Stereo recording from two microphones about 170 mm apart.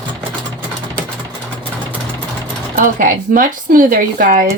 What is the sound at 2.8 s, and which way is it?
Speech, 50° right (ahead or behind).